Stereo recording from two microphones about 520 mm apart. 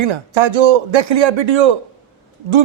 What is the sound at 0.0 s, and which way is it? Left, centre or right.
Speech, right.